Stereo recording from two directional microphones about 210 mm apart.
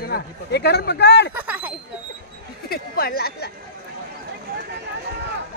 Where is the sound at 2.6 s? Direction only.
45° left (ahead or behind).